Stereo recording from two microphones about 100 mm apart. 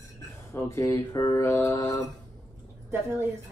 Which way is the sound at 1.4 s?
20° left (ahead or behind).